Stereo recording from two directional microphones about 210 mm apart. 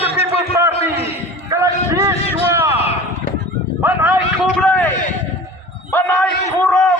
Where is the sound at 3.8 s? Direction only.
10° right (ahead or behind).